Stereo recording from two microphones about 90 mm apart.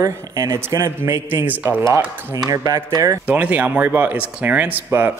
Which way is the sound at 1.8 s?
40° right (ahead or behind).